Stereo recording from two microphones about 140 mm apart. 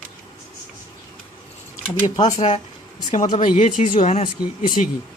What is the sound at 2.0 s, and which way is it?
Speech, 30° left (ahead or behind).